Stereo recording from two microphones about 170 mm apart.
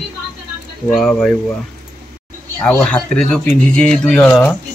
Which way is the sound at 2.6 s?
5° left (ahead or behind).